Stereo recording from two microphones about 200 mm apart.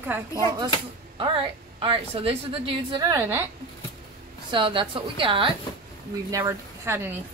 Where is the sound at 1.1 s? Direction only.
25° right (ahead or behind).